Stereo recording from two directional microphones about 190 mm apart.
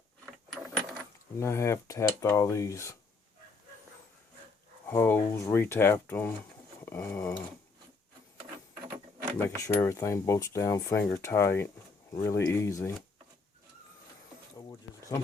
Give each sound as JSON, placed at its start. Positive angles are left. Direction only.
{"t": 1.4, "sound": "speech", "side_deg": 15}
{"t": 4.9, "sound": "speech", "side_deg": 10}
{"t": 6.8, "sound": "dog", "side_deg": 15}
{"t": 9.2, "sound": "speech", "side_deg": 15}